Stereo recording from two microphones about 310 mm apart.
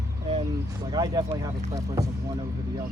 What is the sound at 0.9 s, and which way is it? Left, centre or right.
Speech, centre.